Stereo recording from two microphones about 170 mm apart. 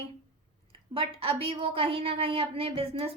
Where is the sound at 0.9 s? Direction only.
35° right (ahead or behind).